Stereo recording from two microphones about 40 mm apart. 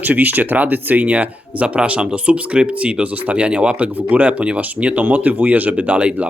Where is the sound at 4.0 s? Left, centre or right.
Right.